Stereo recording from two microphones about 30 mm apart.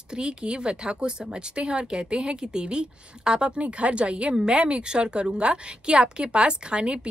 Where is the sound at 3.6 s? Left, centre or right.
Right.